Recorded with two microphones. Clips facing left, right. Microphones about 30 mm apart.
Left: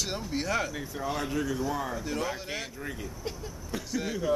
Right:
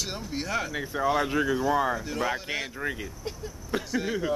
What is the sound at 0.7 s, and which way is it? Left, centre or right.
Speech, right.